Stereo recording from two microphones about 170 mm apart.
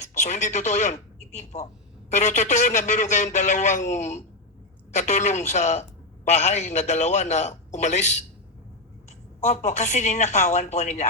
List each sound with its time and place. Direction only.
0.2 s a man's voice: 45° left (ahead or behind)
2.0 s a man's voice: 40° left (ahead or behind)
9.4 s a woman's voice: 40° left (ahead or behind)